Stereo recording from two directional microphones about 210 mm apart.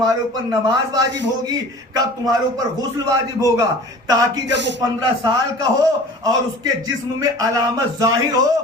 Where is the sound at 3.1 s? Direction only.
15° right (ahead or behind).